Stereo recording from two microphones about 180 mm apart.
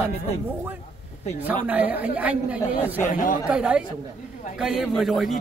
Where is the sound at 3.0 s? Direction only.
45° left (ahead or behind).